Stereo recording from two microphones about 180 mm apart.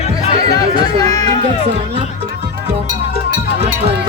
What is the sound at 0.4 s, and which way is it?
Chatter, 20° left (ahead or behind).